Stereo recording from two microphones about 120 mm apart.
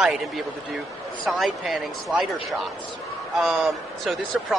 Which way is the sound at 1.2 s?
Centre (ahead or behind).